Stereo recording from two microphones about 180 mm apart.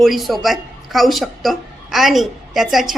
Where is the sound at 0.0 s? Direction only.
Centre (ahead or behind).